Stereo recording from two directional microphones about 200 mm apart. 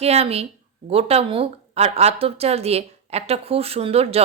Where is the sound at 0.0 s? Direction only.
30° right (ahead or behind).